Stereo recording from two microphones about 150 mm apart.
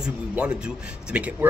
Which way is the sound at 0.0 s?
5° right (ahead or behind).